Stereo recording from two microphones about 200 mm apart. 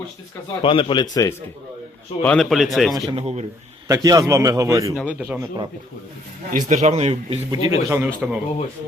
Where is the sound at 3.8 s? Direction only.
15° right (ahead or behind).